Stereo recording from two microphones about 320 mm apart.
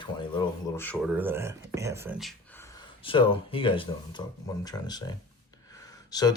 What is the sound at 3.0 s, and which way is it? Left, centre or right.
Speech, centre.